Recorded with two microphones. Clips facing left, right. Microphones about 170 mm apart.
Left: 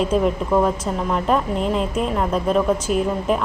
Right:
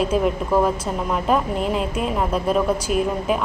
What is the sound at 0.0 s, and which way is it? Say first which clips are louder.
A woman's voice: left 1 dB; 5° right (ahead or behind).